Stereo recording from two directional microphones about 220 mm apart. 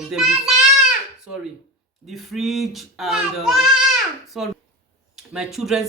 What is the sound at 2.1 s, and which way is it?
Speech, centre (ahead or behind).